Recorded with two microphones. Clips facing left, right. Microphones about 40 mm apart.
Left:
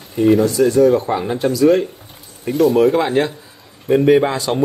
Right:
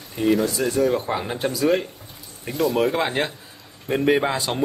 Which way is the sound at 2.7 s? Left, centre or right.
Centre.